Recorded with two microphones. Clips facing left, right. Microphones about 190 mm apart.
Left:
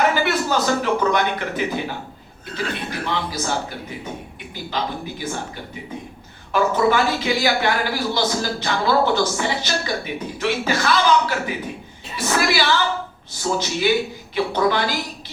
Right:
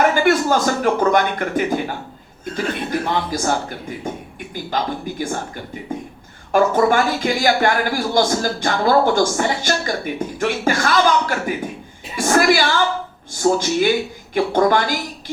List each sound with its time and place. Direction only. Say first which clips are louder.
0.1 s speech: right 5 dB; 50° right (ahead or behind)
3.0 s speech: right 4 dB; 50° right (ahead or behind)
4.5 s speech: right 3 dB; 50° right (ahead or behind)
6.5 s speech: right 3 dB; 50° right (ahead or behind)